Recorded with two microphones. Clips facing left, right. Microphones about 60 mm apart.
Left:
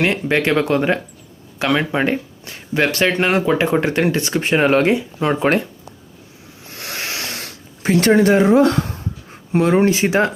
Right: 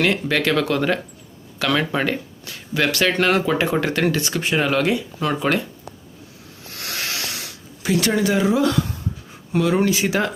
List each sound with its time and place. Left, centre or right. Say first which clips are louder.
0.0 s speech: left 2 dB; left
6.7 s a sound: left 1 dB; left
9.5 s speech: left 4 dB; left